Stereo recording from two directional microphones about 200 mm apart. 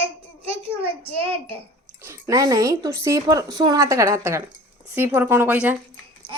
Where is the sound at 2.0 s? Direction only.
15° right (ahead or behind).